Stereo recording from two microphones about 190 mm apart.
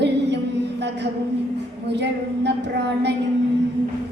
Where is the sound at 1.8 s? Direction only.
65° right (ahead or behind).